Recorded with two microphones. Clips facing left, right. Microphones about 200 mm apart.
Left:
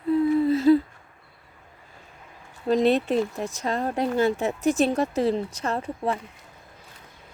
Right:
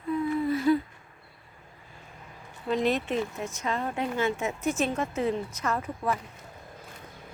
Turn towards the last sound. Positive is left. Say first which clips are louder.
# left 3 dB
turn(degrees=30)  # may be behind; listen again after turning